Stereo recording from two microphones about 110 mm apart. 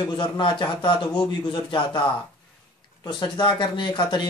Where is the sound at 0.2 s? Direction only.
50° left (ahead or behind).